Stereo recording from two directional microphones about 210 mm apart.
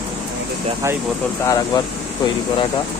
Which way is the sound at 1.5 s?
20° left (ahead or behind).